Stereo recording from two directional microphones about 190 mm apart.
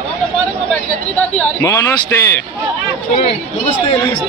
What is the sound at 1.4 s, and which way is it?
Speech, 15° left (ahead or behind).